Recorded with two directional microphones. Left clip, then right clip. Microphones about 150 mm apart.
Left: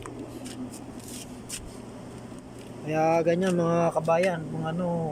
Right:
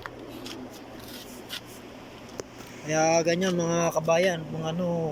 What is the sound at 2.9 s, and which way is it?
Speech, 5° left (ahead or behind).